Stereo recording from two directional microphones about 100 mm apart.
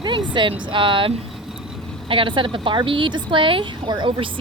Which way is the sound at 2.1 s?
60° right (ahead or behind).